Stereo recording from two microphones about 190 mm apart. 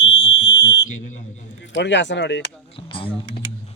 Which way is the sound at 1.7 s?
70° left (ahead or behind).